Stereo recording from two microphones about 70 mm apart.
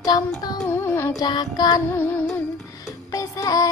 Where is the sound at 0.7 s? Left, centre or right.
Left.